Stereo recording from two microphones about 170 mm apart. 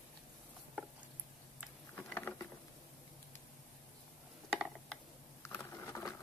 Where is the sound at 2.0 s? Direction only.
10° left (ahead or behind).